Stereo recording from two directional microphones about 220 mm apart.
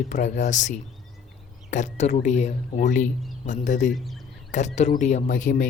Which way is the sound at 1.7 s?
30° left (ahead or behind).